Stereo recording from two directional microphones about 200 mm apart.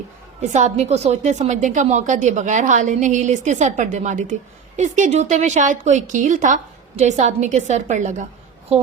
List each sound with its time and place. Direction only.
0.5 s a woman's voice: 35° right (ahead or behind)